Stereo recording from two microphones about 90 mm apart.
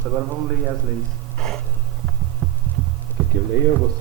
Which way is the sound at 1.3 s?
5° left (ahead or behind).